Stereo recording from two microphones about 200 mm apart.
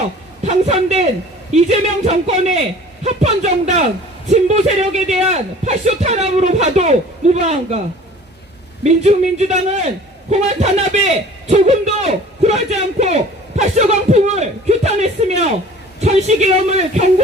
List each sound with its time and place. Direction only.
0.4 s a man's voice: 35° right (ahead or behind)
8.8 s a man's voice: 35° right (ahead or behind)